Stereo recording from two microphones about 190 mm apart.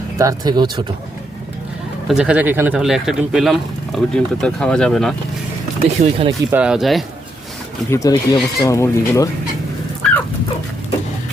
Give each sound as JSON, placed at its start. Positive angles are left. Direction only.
{"t": 0.2, "sound": "speech", "side_deg": -20}
{"t": 2.0, "sound": "speech", "side_deg": -5}
{"t": 6.0, "sound": "speech", "side_deg": -30}
{"t": 6.5, "sound": "speech", "side_deg": -5}
{"t": 7.9, "sound": "speech", "side_deg": 15}